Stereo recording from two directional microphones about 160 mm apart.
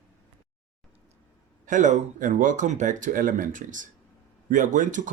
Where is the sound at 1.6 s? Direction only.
50° right (ahead or behind).